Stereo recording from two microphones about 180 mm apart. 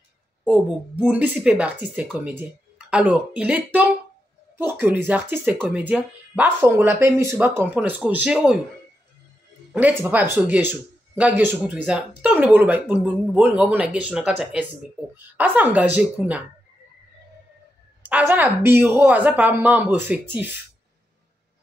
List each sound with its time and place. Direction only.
0.5 s speech: 10° right (ahead or behind)
9.7 s speech: 10° right (ahead or behind)
18.0 s speech: 10° right (ahead or behind)